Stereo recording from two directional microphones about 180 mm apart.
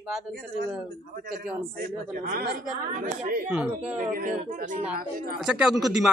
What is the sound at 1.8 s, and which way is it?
Speech, 60° right (ahead or behind).